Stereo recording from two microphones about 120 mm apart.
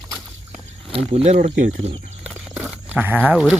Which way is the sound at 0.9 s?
55° right (ahead or behind).